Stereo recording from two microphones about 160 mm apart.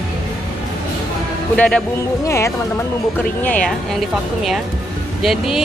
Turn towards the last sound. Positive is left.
turn(degrees=0)  # may be behind; listen again after turning